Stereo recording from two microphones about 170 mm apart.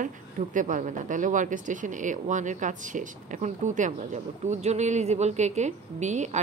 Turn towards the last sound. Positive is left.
turn(degrees=-45)  # may be behind; listen again after turning